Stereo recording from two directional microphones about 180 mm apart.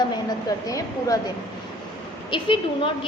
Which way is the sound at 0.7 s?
20° left (ahead or behind).